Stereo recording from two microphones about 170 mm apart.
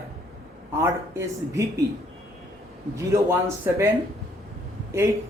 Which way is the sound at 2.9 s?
15° right (ahead or behind).